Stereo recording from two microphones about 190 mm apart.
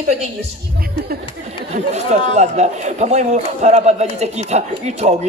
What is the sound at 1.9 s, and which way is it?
A man's voice, 35° right (ahead or behind).